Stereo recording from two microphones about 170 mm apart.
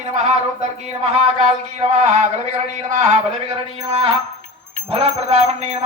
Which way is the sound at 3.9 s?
35° right (ahead or behind).